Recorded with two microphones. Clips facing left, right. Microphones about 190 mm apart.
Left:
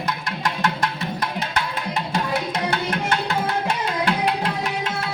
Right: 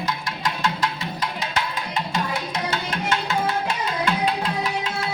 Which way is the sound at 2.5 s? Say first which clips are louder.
Left 3 dB; 60° left (ahead or behind).